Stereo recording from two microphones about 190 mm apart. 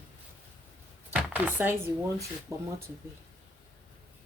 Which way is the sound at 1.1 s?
10° right (ahead or behind).